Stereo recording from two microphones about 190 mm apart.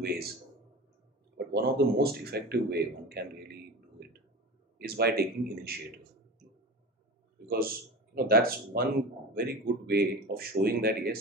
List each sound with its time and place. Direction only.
1.3 s speech: 55° right (ahead or behind)
4.7 s speech: 55° right (ahead or behind)
7.4 s speech: 50° right (ahead or behind)